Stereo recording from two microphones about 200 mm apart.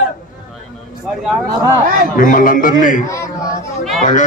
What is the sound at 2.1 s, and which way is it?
A man's voice, 40° left (ahead or behind).